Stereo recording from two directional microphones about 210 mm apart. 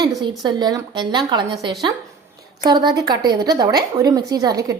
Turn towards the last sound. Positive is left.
turn(degrees=-15)  # may be behind; listen again after turning